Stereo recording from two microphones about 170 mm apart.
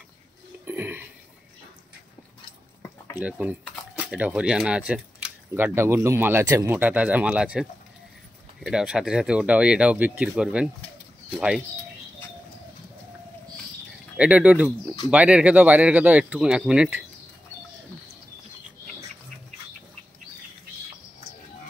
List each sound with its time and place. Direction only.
0.7 s a sound: 10° right (ahead or behind)
3.2 s speech: 10° right (ahead or behind)
14.1 s speech: 5° right (ahead or behind)